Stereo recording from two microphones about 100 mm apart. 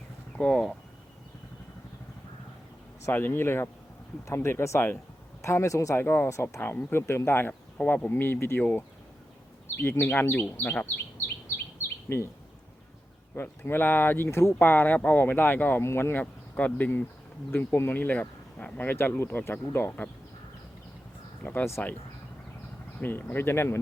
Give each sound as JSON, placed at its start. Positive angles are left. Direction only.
{"t": 0.3, "sound": "speech", "side_deg": 10}
{"t": 3.1, "sound": "speech", "side_deg": 20}
{"t": 9.8, "sound": "speech", "side_deg": 20}
{"t": 12.0, "sound": "speech", "side_deg": 25}
{"t": 13.3, "sound": "speech", "side_deg": 25}
{"t": 21.4, "sound": "speech", "side_deg": 20}
{"t": 23.0, "sound": "speech", "side_deg": 20}